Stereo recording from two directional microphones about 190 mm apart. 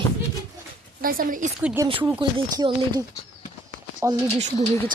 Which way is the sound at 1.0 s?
50° right (ahead or behind).